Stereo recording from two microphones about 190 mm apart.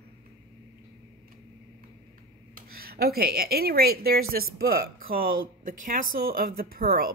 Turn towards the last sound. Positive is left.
turn(degrees=-50)  # may be behind; listen again after turning